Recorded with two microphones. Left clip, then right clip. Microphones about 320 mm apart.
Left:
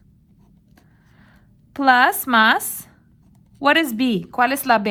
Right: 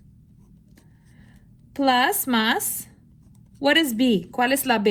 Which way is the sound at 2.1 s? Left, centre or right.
Left.